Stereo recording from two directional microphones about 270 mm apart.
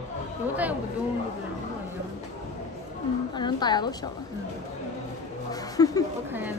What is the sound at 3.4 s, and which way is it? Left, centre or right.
Speech, centre.